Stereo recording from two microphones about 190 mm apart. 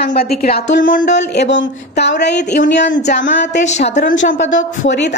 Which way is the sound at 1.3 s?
65° left (ahead or behind).